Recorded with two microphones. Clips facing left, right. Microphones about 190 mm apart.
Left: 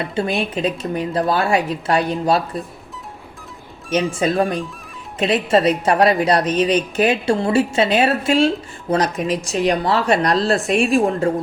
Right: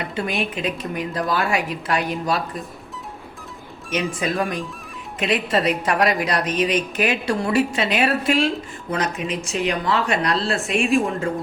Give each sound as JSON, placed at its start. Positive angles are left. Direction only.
{"t": 0.0, "sound": "a woman's voice", "side_deg": 30}
{"t": 4.2, "sound": "a woman's voice", "side_deg": 30}